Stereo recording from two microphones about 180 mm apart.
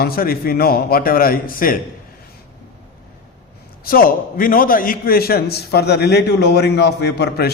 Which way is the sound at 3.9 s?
50° left (ahead or behind).